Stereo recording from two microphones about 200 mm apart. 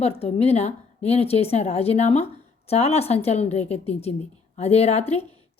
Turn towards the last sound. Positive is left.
turn(degrees=30)  # may be behind; listen again after turning